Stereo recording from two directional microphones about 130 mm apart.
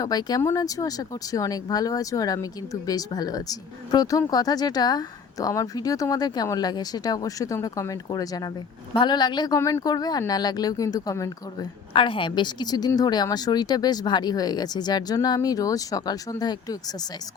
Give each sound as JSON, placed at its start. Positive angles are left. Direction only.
{"t": 0.0, "sound": "speech", "side_deg": 30}
{"t": 9.6, "sound": "speech", "side_deg": 20}
{"t": 11.9, "sound": "speech", "side_deg": 40}